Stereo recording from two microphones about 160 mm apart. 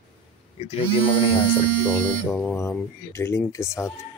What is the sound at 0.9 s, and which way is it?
Speech, 35° left (ahead or behind).